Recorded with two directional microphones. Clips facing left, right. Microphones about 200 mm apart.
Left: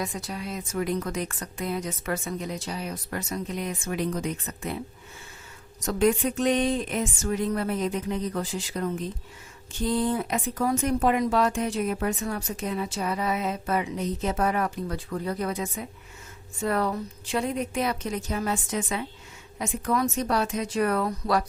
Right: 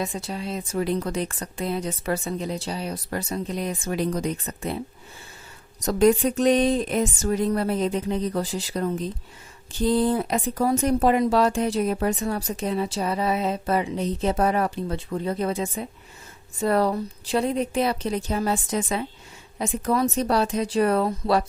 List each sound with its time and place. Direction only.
0.0 s speech: 25° right (ahead or behind)
5.8 s speech: 35° right (ahead or behind)